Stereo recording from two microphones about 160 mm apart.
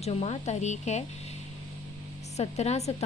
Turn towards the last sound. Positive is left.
turn(degrees=45)  # may be behind; listen again after turning